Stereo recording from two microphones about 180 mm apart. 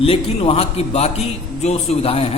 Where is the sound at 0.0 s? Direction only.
35° left (ahead or behind).